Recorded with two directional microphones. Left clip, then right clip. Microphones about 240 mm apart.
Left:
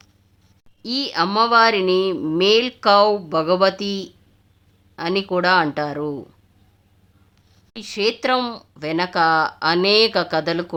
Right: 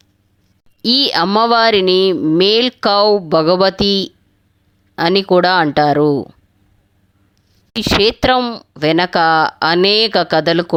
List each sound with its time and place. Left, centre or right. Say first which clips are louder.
0.8 s a woman's voice: right 8 dB; right
7.8 s speech: right 8 dB; right